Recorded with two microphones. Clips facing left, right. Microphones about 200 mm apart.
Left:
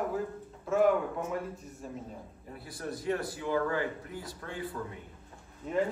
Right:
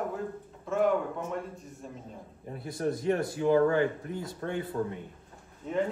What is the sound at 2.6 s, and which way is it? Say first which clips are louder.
Speech: right 8 dB; 25° right (ahead or behind).